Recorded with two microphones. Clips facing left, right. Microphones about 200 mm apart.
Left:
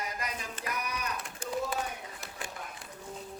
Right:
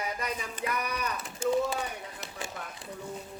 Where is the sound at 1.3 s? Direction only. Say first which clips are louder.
Right 8 dB; 25° right (ahead or behind).